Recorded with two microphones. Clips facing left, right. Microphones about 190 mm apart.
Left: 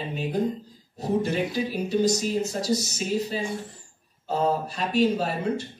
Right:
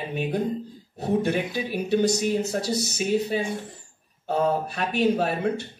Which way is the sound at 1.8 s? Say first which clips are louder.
Right 2 dB; 65° right (ahead or behind).